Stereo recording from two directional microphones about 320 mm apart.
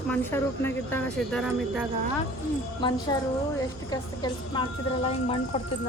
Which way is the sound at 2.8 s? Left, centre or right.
Centre.